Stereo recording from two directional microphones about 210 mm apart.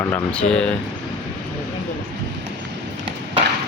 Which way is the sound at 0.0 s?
10° left (ahead or behind).